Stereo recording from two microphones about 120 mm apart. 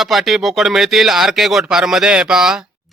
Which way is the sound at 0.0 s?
Centre (ahead or behind).